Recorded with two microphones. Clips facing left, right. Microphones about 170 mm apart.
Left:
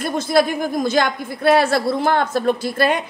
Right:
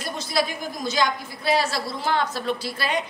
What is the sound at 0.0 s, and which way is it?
A woman's voice, 50° left (ahead or behind).